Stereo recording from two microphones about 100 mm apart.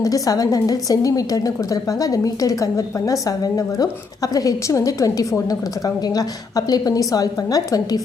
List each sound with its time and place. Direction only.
0.0 s a woman's voice: 40° left (ahead or behind)